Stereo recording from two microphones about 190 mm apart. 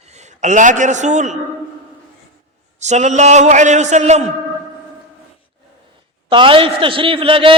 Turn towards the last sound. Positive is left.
turn(degrees=-30)  # may be behind; listen again after turning